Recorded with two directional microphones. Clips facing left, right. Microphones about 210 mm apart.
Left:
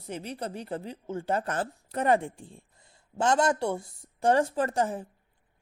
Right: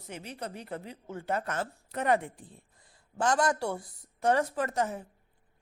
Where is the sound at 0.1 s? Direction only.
30° left (ahead or behind).